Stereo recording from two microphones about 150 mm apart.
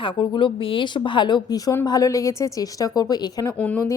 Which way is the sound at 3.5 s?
10° left (ahead or behind).